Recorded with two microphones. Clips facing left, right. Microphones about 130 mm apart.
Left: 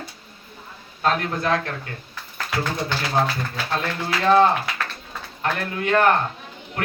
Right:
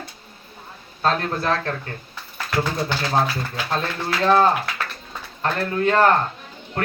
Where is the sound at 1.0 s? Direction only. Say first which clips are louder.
Even; 30° right (ahead or behind).